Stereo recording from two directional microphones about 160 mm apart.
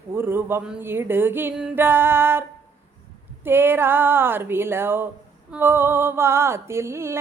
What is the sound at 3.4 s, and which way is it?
Speech, 15° right (ahead or behind).